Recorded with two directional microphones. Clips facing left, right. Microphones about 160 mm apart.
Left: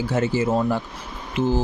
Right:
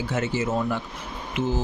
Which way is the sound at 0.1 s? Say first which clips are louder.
Left 5 dB; 35° left (ahead or behind).